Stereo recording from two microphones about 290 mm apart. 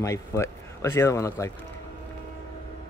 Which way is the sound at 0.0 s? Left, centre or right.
Centre.